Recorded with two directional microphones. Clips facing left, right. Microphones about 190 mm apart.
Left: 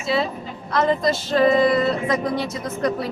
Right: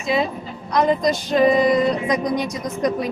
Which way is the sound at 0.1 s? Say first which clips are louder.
Right 2 dB; 15° right (ahead or behind).